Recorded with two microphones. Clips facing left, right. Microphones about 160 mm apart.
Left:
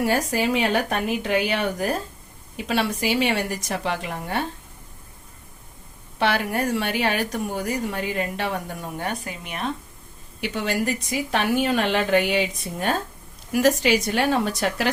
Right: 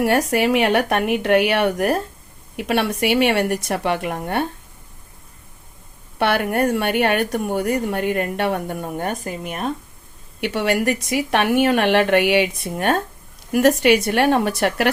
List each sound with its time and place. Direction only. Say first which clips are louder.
0.0 s speech: right 4 dB; 65° right (ahead or behind)
6.1 s speech: right 4 dB; 60° right (ahead or behind)
10.4 s a woman's voice: right 5 dB; 65° right (ahead or behind)